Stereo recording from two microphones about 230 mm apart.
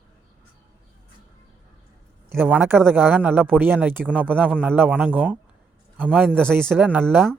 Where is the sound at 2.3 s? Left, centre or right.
Centre.